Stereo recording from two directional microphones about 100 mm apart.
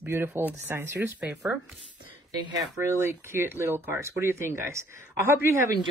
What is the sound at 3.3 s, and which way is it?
Speech, 20° right (ahead or behind).